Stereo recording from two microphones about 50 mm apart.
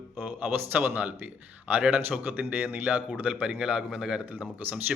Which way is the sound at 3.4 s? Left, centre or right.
Centre.